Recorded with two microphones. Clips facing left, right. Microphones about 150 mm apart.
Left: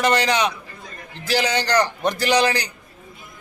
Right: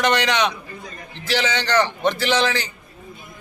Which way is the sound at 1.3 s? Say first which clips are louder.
Left 1 dB; 10° left (ahead or behind).